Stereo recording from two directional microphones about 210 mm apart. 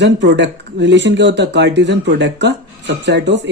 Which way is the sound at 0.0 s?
60° right (ahead or behind).